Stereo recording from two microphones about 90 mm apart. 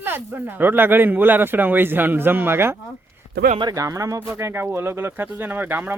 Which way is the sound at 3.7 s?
35° right (ahead or behind).